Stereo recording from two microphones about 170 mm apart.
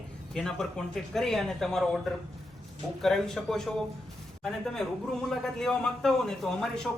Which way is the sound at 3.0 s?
Centre (ahead or behind).